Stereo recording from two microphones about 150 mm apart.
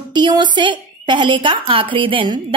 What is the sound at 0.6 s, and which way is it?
A woman's voice, 30° right (ahead or behind).